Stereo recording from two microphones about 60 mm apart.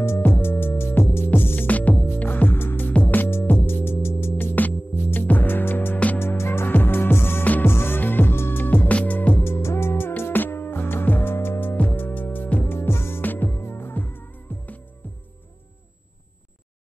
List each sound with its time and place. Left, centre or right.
0.2 s music: left
9.4 s music: left
13.2 s music: left